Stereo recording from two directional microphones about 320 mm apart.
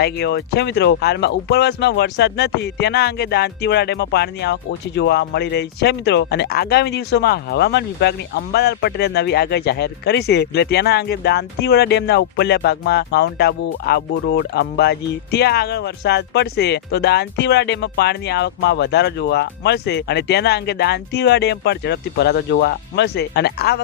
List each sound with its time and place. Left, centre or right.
0.0 s speech: left